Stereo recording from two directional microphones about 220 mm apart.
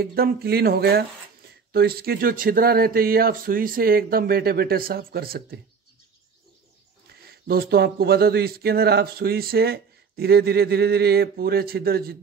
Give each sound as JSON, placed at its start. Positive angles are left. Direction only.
{"t": 0.0, "sound": "speech", "side_deg": -45}
{"t": 7.2, "sound": "speech", "side_deg": -45}